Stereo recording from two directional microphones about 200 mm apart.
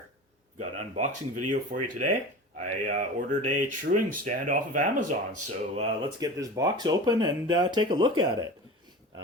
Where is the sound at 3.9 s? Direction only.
45° right (ahead or behind).